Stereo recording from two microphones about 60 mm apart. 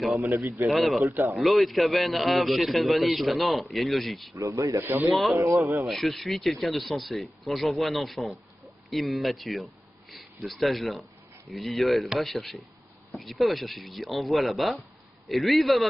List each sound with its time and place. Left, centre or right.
0.2 s a man's voice: right
0.7 s a man's voice: centre
4.4 s speech: right
5.1 s a man's voice: centre